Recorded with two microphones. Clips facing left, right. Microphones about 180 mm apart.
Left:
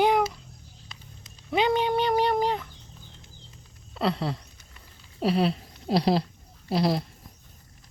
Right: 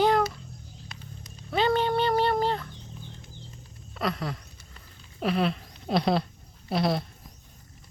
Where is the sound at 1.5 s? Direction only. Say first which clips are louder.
Left 1 dB; 15° left (ahead or behind).